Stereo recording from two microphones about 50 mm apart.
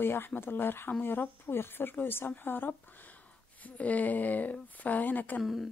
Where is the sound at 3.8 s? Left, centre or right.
Left.